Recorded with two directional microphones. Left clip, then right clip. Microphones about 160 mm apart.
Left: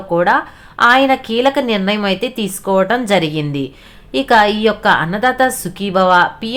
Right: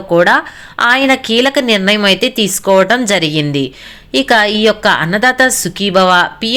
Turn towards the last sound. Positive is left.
turn(degrees=-20)  # may be behind; listen again after turning